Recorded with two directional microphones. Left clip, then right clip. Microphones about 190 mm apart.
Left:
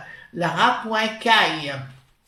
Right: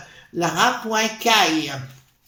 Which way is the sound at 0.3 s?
55° right (ahead or behind).